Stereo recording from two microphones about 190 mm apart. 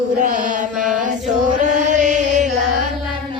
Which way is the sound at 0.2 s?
40° right (ahead or behind).